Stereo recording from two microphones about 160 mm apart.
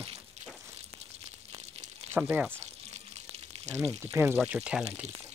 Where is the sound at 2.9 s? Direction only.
45° right (ahead or behind).